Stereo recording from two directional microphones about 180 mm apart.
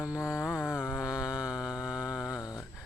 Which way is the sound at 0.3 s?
5° right (ahead or behind).